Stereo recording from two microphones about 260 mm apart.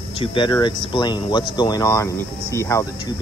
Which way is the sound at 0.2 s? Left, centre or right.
Centre.